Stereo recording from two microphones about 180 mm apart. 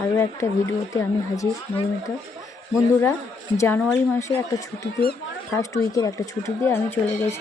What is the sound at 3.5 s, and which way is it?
Speech, 15° left (ahead or behind).